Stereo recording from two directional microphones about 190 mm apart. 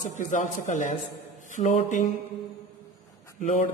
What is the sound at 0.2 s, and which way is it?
A man's voice, 40° left (ahead or behind).